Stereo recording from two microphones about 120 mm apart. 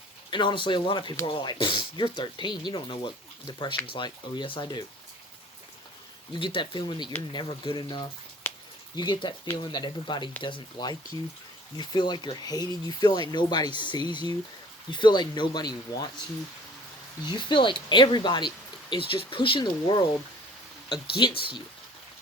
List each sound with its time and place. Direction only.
0.3 s speech: 40° left (ahead or behind)
6.3 s speech: 45° left (ahead or behind)
8.4 s a sound: 15° left (ahead or behind)
9.0 s speech: 40° left (ahead or behind)
17.2 s speech: 40° left (ahead or behind)